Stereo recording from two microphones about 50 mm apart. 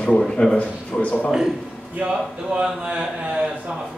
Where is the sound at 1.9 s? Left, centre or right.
Centre.